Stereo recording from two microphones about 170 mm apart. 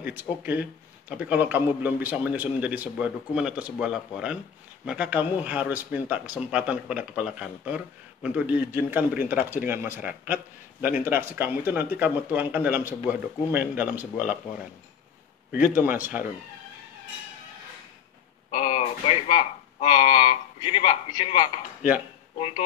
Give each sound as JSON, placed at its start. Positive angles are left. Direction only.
{"t": 0.0, "sound": "speech", "side_deg": -10}
{"t": 15.7, "sound": "speech", "side_deg": -10}
{"t": 18.5, "sound": "speech", "side_deg": 30}